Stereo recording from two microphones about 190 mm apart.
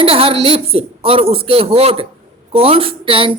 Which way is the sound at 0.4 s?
30° right (ahead or behind).